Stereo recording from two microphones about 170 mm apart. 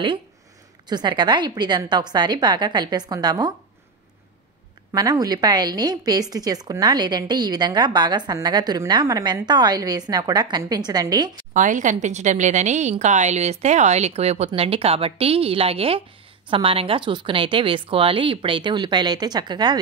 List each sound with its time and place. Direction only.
0.8 s a woman's voice: 25° right (ahead or behind)
4.9 s a woman's voice: 20° right (ahead or behind)
11.5 s a woman's voice: 50° right (ahead or behind); by 19.8 s 25° right (ahead or behind)